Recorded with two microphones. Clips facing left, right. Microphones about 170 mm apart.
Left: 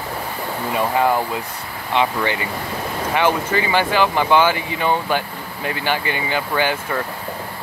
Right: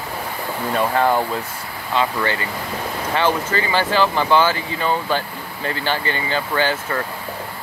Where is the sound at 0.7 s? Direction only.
10° left (ahead or behind).